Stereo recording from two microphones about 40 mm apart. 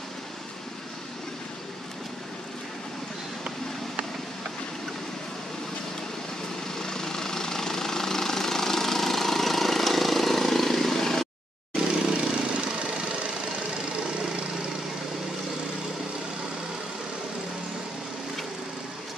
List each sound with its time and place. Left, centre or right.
6.8 s vehicle: centre
11.7 s vehicle: centre